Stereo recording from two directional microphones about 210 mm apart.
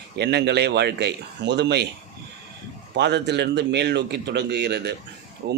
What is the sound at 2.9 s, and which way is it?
Speech, 55° right (ahead or behind).